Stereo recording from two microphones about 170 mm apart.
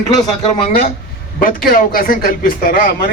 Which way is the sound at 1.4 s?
55° left (ahead or behind).